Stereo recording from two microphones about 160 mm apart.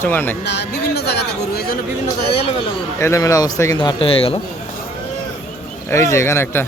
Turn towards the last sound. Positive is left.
turn(degrees=15)  # may be behind; listen again after turning